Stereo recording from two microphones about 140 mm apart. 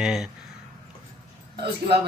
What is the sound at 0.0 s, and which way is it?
Speech, 5° right (ahead or behind).